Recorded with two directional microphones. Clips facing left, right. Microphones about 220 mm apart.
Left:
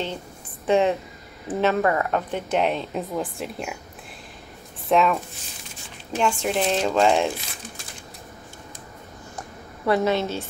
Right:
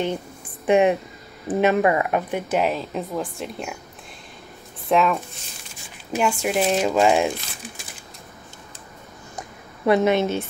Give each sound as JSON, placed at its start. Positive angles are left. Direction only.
{"t": 0.7, "sound": "speech", "side_deg": -15}
{"t": 4.8, "sound": "speech", "side_deg": 0}
{"t": 9.8, "sound": "a woman's voice", "side_deg": -20}